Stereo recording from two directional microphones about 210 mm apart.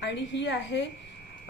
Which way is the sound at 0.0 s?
60° left (ahead or behind).